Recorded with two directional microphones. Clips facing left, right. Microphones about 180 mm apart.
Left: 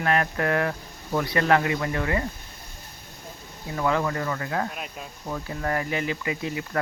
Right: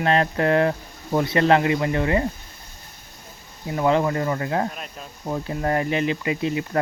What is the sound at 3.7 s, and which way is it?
Speech, 25° right (ahead or behind).